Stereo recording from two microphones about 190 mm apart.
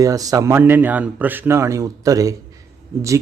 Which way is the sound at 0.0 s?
20° right (ahead or behind).